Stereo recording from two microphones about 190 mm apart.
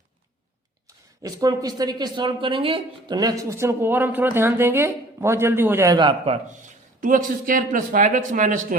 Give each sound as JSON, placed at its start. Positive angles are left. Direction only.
{"t": 1.2, "sound": "speech", "side_deg": -20}
{"t": 7.0, "sound": "speech", "side_deg": -45}